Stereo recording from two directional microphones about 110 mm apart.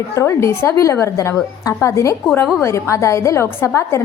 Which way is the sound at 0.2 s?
25° left (ahead or behind).